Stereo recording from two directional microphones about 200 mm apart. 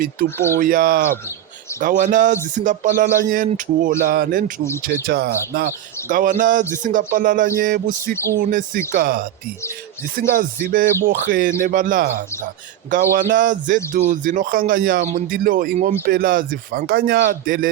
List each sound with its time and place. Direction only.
0.0 s a man's voice: 45° right (ahead or behind)